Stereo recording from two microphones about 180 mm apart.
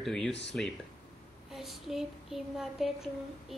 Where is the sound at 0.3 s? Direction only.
75° left (ahead or behind).